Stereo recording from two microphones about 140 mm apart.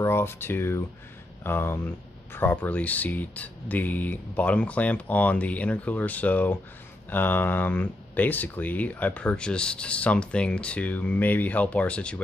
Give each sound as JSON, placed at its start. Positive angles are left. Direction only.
{"t": 0.0, "sound": "speech", "side_deg": 15}